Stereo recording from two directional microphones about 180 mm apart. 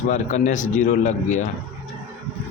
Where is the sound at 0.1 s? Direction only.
40° left (ahead or behind).